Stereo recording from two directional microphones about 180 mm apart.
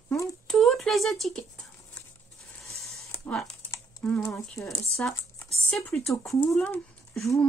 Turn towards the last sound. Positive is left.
turn(degrees=5)  # may be behind; listen again after turning